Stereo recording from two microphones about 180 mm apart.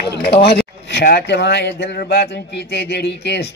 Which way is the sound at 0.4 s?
65° left (ahead or behind).